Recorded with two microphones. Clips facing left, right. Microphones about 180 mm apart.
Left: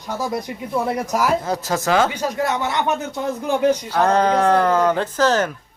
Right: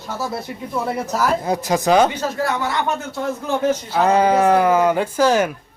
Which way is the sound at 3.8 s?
10° right (ahead or behind).